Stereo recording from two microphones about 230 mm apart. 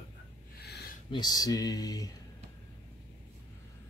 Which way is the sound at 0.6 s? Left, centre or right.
Left.